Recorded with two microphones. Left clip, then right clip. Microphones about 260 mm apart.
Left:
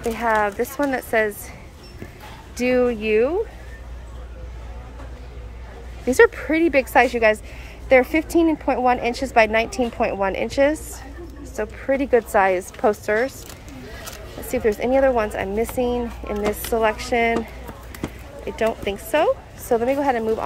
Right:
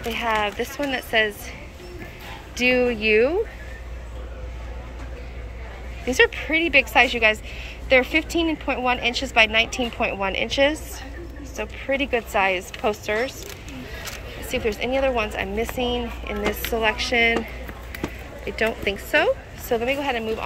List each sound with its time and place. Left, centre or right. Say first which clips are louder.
0.1 s speech: left 2 dB; centre
2.5 s speech: even; centre
6.1 s speech: left 3 dB; left
14.5 s speech: left 4 dB; left